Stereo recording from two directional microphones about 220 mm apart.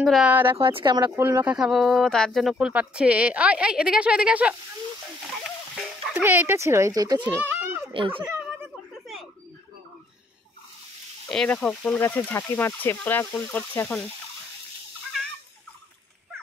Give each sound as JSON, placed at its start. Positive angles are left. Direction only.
{"t": 0.0, "sound": "speech", "side_deg": 0}
{"t": 0.6, "sound": "speech", "side_deg": -25}
{"t": 5.8, "sound": "speech", "side_deg": -5}
{"t": 7.5, "sound": "a sound", "side_deg": -10}
{"t": 7.9, "sound": "a child's voice", "side_deg": -25}
{"t": 8.3, "sound": "a sound", "side_deg": -10}
{"t": 11.2, "sound": "speech", "side_deg": 5}